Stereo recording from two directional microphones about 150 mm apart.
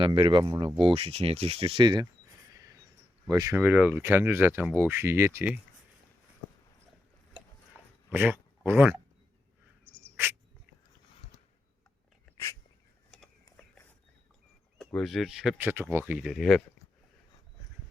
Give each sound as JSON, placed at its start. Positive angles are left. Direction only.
{"t": 0.0, "sound": "speech", "side_deg": -35}
{"t": 2.5, "sound": "a sound", "side_deg": -25}
{"t": 3.2, "sound": "speech", "side_deg": -25}
{"t": 3.6, "sound": "speech", "side_deg": -10}
{"t": 8.1, "sound": "speech", "side_deg": -15}
{"t": 9.8, "sound": "bird", "side_deg": 10}
{"t": 13.1, "sound": "a sound", "side_deg": 5}
{"t": 14.8, "sound": "speech", "side_deg": 0}
{"t": 15.6, "sound": "speech", "side_deg": -15}